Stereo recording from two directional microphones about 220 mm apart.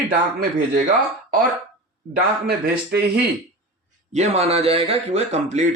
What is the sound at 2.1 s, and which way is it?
Speech, 45° right (ahead or behind).